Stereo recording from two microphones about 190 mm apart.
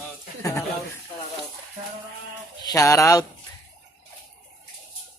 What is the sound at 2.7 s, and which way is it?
Speech, 15° left (ahead or behind).